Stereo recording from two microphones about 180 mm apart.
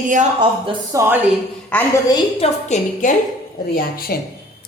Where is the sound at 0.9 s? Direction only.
10° right (ahead or behind).